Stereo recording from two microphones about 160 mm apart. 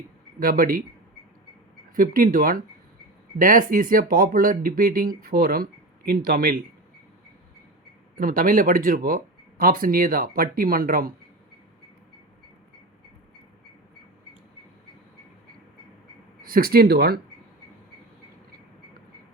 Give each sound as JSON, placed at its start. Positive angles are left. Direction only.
{"t": 0.3, "sound": "speech", "side_deg": -65}
{"t": 2.0, "sound": "speech", "side_deg": -60}
{"t": 8.1, "sound": "speech", "side_deg": -65}
{"t": 16.4, "sound": "speech", "side_deg": -65}